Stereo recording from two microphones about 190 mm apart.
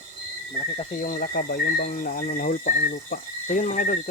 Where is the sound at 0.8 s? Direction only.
40° left (ahead or behind).